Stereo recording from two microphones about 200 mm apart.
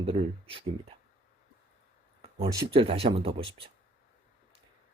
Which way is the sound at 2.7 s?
25° right (ahead or behind).